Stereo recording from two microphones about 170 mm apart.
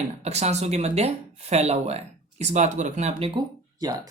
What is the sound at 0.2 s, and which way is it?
Speech, 40° right (ahead or behind).